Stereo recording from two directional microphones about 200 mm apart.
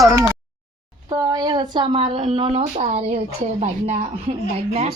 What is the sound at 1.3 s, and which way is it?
Speech, 20° right (ahead or behind).